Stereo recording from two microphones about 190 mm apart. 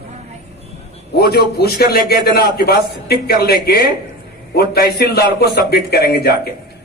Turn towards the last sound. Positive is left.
turn(degrees=55)  # may be behind; listen again after turning